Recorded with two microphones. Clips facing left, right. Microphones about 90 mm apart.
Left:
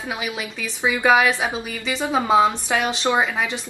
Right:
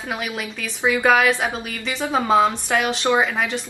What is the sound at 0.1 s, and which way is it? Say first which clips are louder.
A woman's voice: right 2 dB; 5° left (ahead or behind).